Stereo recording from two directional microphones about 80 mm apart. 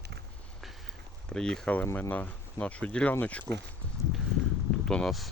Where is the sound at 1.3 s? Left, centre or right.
Centre.